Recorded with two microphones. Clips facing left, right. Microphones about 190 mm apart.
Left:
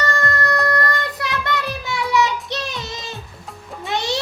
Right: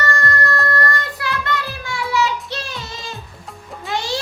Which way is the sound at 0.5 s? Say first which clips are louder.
Left 1 dB; 15° left (ahead or behind).